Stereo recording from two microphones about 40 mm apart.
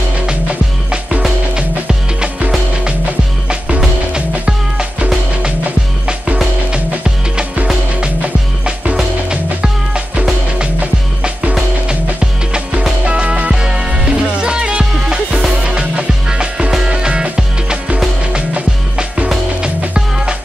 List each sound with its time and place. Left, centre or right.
1.5 s music: right
3.4 s music: right
9.3 s music: right
11.9 s music: right